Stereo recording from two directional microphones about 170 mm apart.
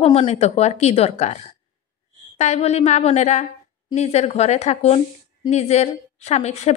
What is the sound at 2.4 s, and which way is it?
A woman's voice, 40° left (ahead or behind).